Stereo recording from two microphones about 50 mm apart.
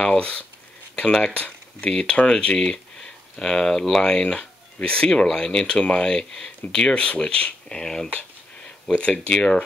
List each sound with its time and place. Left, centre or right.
0.2 s speech: left
8.9 s speech: left